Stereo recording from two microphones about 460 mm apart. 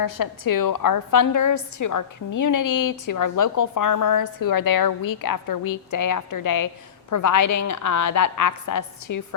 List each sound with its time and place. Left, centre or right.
0.0 s a woman's voice: left